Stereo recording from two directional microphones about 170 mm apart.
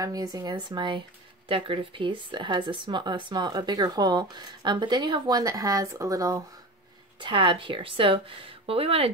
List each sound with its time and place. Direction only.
0.0 s speech: 20° right (ahead or behind)